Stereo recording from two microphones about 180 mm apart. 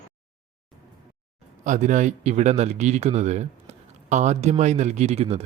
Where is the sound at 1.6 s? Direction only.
45° right (ahead or behind).